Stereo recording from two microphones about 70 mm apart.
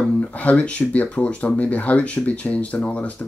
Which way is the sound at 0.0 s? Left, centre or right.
Centre.